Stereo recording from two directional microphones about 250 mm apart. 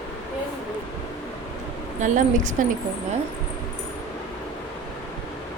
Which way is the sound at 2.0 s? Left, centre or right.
Right.